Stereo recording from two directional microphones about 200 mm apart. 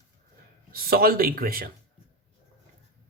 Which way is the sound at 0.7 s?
50° right (ahead or behind).